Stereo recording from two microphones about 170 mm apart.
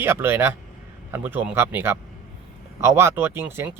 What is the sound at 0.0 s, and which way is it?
Speech, 15° right (ahead or behind).